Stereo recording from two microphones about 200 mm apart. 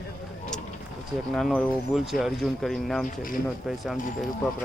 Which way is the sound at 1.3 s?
Centre (ahead or behind).